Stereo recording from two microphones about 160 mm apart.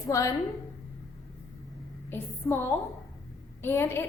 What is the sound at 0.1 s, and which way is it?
Speech, 20° left (ahead or behind).